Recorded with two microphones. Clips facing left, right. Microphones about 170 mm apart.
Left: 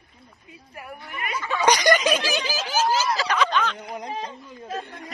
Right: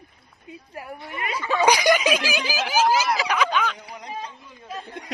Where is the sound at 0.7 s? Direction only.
25° right (ahead or behind).